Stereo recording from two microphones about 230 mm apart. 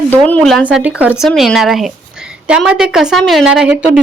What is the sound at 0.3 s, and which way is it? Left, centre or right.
Speech, centre.